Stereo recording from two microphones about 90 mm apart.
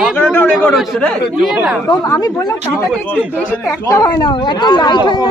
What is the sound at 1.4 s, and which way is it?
Speech, 5° right (ahead or behind).